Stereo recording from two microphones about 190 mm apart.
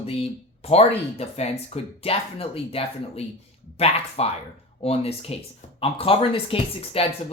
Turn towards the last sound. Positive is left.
turn(degrees=30)  # may be behind; listen again after turning